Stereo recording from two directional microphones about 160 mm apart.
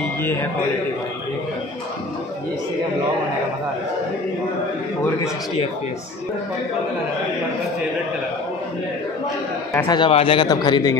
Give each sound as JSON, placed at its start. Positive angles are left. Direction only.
{"t": 0.2, "sound": "a man's voice", "side_deg": 15}
{"t": 9.8, "sound": "speech", "side_deg": 30}